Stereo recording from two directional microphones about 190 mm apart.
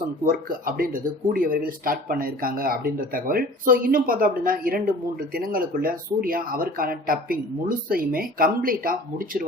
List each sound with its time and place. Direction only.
0.3 s speech: 50° right (ahead or behind)